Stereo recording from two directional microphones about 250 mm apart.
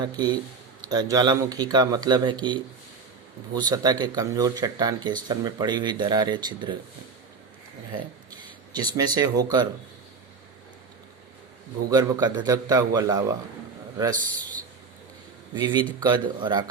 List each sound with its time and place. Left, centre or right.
0.0 s speech: centre
8.7 s speech: centre
11.9 s speech: centre
15.5 s speech: centre